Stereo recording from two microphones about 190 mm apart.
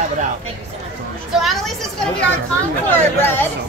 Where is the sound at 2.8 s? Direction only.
10° left (ahead or behind).